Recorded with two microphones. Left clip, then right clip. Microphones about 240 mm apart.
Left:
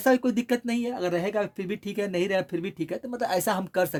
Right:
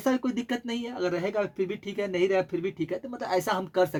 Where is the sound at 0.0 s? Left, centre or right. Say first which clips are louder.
Left 5 dB; left.